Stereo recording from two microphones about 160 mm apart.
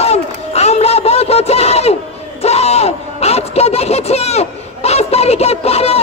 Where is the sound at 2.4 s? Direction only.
40° left (ahead or behind).